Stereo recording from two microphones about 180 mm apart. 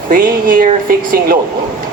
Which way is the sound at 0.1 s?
50° right (ahead or behind).